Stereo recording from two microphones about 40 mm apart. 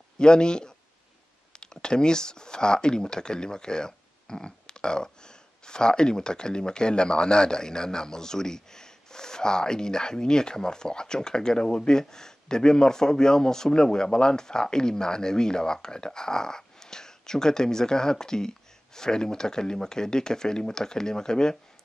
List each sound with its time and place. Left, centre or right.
0.2 s a man's voice: left